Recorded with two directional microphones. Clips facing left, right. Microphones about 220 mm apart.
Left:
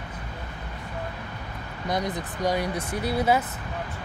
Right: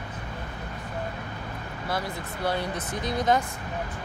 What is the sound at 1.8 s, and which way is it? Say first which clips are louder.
Speech: left 4 dB; 20° left (ahead or behind).